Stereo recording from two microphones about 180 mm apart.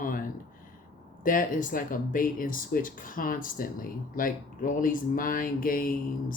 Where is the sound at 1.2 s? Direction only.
50° left (ahead or behind).